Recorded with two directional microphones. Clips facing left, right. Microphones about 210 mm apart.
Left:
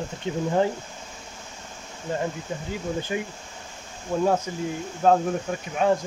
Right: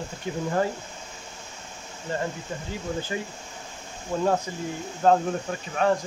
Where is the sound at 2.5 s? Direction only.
15° left (ahead or behind).